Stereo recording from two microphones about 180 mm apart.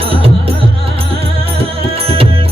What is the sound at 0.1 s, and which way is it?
Music, 30° right (ahead or behind).